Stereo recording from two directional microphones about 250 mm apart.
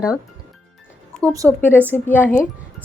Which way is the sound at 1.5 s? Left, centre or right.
Centre.